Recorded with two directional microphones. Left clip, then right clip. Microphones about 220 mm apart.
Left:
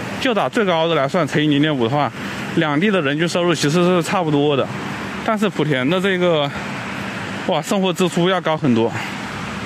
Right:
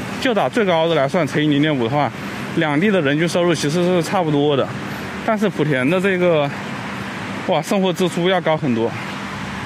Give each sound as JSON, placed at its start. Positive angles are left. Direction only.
{"t": 0.2, "sound": "speech", "side_deg": 10}